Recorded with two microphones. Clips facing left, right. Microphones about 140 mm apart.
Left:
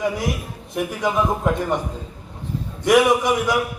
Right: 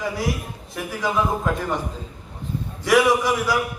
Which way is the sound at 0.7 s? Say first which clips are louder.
Left 3 dB; 20° left (ahead or behind).